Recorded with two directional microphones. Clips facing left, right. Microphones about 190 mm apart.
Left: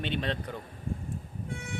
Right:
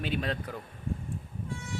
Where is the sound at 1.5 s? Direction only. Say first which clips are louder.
Even; 60° left (ahead or behind).